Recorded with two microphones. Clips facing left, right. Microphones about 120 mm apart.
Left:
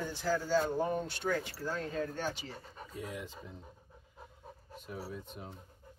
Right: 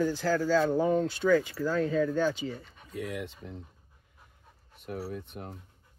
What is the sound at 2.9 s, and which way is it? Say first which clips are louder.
Speech: right 7 dB; 70° right (ahead or behind).